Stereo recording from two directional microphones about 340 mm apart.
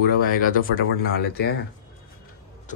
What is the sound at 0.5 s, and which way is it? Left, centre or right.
Speech, left.